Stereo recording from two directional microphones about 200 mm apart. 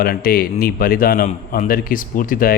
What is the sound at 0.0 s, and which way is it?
A man's voice, 50° left (ahead or behind).